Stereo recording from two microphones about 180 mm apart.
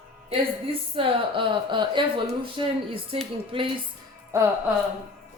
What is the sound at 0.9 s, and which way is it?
Speech, 30° right (ahead or behind).